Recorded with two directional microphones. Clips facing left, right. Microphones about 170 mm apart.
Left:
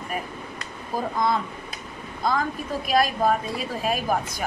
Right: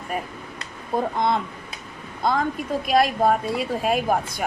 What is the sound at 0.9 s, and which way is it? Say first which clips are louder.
Speech: right 4 dB; 25° right (ahead or behind).